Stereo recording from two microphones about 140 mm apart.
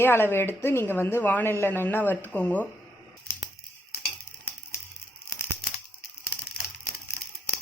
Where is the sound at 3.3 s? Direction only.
20° left (ahead or behind).